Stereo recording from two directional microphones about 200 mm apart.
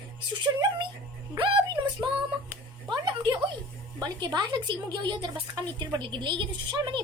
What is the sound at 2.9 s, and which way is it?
A woman's voice, 25° right (ahead or behind).